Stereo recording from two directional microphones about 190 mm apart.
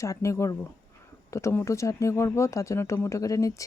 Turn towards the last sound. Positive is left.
turn(degrees=15)  # may be behind; listen again after turning